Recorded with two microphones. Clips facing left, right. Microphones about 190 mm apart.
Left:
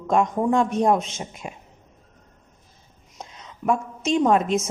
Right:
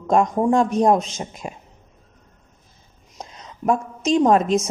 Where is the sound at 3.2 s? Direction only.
40° right (ahead or behind).